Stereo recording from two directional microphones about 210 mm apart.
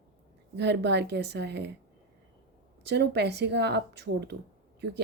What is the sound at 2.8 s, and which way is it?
A woman's voice, 55° right (ahead or behind).